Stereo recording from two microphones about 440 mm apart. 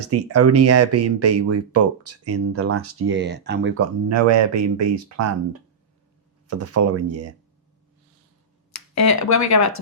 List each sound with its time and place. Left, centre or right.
0.0 s speech: right
6.5 s speech: right
8.7 s a sound: left
9.5 s speech: left